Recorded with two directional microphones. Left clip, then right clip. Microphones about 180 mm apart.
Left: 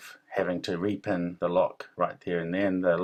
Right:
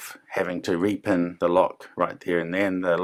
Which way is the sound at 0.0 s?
35° right (ahead or behind).